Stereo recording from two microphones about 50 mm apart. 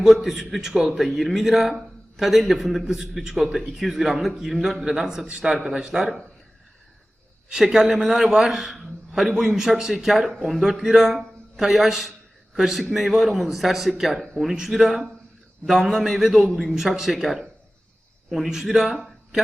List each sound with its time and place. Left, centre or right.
0.0 s a man's voice: centre
7.5 s a man's voice: centre
10.6 s a man's voice: centre